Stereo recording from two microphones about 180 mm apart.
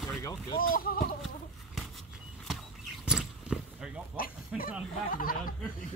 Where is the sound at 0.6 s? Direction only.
50° left (ahead or behind).